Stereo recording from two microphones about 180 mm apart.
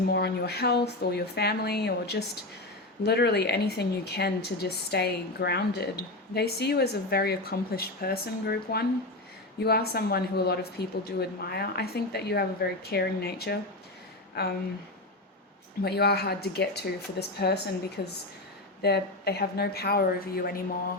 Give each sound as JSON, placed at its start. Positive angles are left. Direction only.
{"t": 0.1, "sound": "speech", "side_deg": 65}
{"t": 15.8, "sound": "speech", "side_deg": 65}